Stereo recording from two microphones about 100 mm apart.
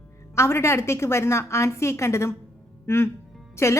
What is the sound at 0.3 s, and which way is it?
A woman's voice, 25° left (ahead or behind).